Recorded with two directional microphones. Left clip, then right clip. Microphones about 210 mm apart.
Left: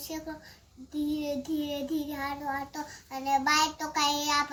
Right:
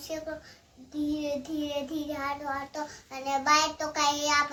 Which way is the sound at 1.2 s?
5° right (ahead or behind).